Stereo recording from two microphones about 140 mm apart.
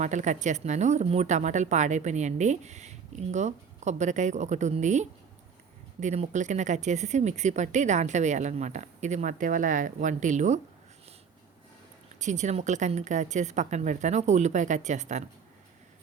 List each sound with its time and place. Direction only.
0.0 s a woman's voice: 60° right (ahead or behind)
12.2 s a woman's voice: 55° right (ahead or behind)